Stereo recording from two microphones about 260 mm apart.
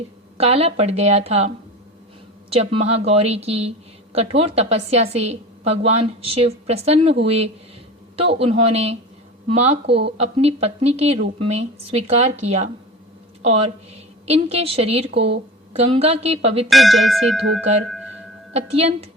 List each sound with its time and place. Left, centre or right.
0.3 s a woman's voice: right
16.6 s tubular bells: centre
18.5 s a woman's voice: right